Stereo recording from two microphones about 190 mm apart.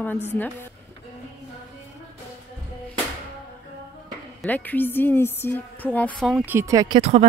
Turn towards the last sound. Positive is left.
turn(degrees=-30)  # may be behind; listen again after turning